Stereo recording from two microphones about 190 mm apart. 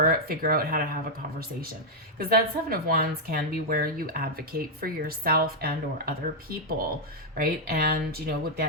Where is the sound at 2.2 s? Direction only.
55° right (ahead or behind).